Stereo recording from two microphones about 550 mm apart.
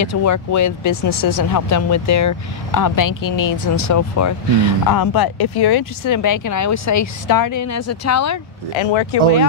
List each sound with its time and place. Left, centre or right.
0.0 s speech: left
8.7 s speech: left